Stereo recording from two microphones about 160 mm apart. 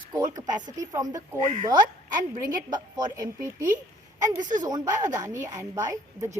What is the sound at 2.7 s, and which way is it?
A woman's voice, 25° right (ahead or behind).